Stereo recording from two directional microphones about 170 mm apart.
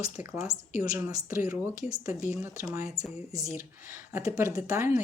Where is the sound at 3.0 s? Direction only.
Centre (ahead or behind).